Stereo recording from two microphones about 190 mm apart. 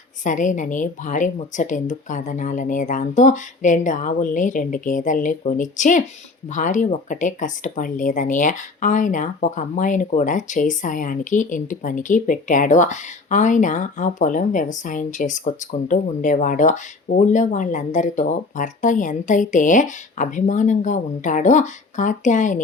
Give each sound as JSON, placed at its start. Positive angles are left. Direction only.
{"t": 0.3, "sound": "speech", "side_deg": 40}